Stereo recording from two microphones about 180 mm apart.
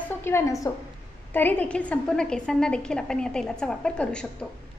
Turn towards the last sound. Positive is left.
turn(degrees=5)  # may be behind; listen again after turning